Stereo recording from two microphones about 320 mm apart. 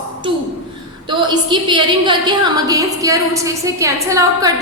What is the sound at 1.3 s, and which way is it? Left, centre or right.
A woman's voice, centre.